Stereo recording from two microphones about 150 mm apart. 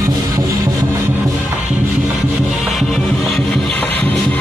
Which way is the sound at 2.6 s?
Centre (ahead or behind).